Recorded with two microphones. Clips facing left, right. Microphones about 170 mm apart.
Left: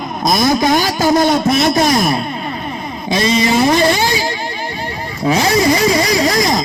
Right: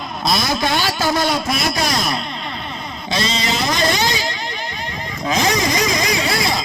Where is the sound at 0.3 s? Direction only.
45° left (ahead or behind).